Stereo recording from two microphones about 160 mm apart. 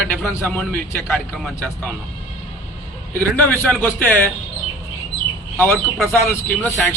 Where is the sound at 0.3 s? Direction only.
15° left (ahead or behind).